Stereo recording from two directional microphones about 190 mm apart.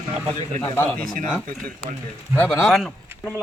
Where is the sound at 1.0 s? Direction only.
45° right (ahead or behind).